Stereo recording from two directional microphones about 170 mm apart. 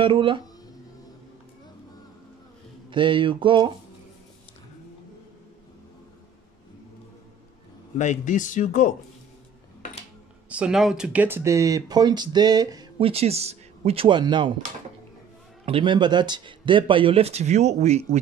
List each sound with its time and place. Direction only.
0.0 s speech: 30° right (ahead or behind)
2.9 s speech: 30° right (ahead or behind)
8.0 s speech: 45° left (ahead or behind)
10.5 s speech: 5° right (ahead or behind); by 13.1 s 25° right (ahead or behind)
13.1 s speech: 35° right (ahead or behind)
15.6 s speech: 30° right (ahead or behind)